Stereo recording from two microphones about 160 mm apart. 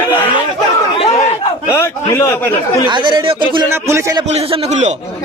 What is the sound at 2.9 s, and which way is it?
Speech, 30° right (ahead or behind).